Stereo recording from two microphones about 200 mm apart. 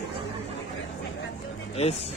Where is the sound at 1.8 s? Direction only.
30° left (ahead or behind).